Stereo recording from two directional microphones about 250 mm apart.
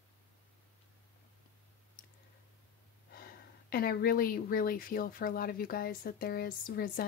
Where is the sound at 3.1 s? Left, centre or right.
Left.